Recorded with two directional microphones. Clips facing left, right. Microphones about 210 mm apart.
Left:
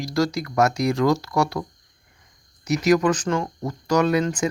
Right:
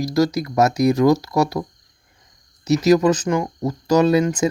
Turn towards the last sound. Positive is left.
turn(degrees=-20)  # may be behind; listen again after turning